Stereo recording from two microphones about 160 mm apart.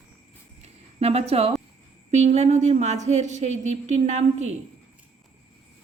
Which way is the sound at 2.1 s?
45° right (ahead or behind).